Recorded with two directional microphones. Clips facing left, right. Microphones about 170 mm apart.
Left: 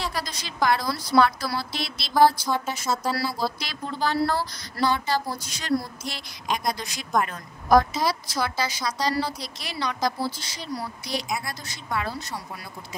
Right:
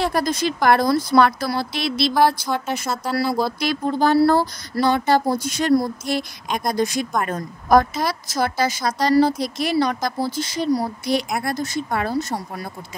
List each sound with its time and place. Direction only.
0.0 s speech: 50° right (ahead or behind)